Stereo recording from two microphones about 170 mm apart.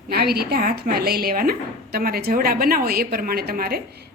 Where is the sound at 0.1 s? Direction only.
65° right (ahead or behind).